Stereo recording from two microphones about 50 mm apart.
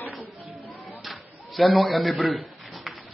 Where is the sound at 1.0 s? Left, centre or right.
Centre.